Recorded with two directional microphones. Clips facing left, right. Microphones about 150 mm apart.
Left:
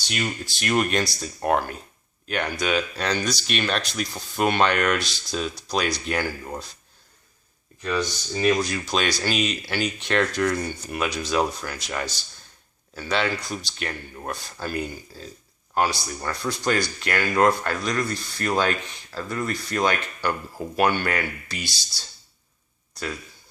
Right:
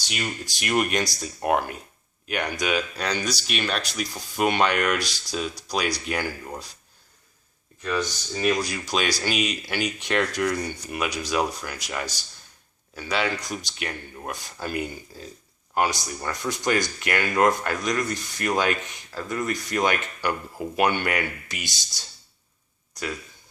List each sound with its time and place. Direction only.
0.1 s speech: 10° right (ahead or behind)
7.8 s speech: centre (ahead or behind)
10.4 s a man's voice: centre (ahead or behind); by 22.0 s 20° right (ahead or behind)